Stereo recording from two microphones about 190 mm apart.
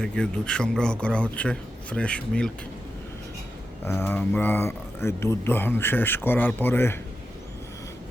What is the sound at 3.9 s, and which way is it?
A man's voice, 10° left (ahead or behind).